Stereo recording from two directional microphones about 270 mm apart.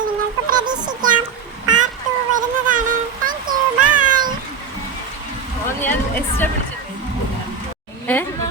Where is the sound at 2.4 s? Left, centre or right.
Right.